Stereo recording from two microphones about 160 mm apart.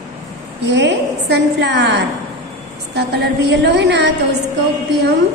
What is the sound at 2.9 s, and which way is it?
A woman's voice, 90° right.